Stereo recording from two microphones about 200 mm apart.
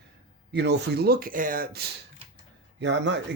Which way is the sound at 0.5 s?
60° right (ahead or behind).